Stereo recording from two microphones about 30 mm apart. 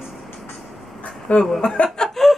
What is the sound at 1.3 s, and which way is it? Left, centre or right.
Speech, left.